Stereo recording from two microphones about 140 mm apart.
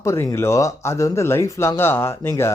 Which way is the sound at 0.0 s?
20° left (ahead or behind).